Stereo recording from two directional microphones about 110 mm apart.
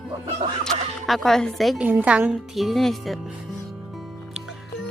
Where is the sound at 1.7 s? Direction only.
10° right (ahead or behind).